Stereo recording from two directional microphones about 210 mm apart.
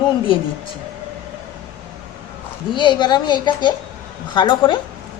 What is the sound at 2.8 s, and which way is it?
A woman's voice, 20° left (ahead or behind).